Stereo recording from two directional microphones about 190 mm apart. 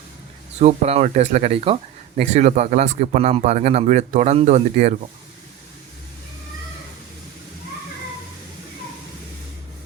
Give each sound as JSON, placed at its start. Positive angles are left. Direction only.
{"t": 0.6, "sound": "speech", "side_deg": -35}